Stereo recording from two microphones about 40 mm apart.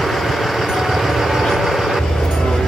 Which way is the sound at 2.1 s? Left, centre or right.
Centre.